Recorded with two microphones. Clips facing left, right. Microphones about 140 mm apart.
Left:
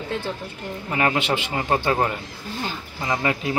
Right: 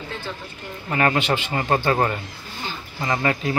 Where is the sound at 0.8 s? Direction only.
10° left (ahead or behind).